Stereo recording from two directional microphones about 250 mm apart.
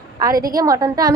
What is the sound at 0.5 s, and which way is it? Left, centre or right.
Speech, centre.